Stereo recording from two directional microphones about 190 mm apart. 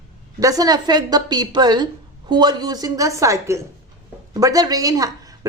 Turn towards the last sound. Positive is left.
turn(degrees=-20)  # may be behind; listen again after turning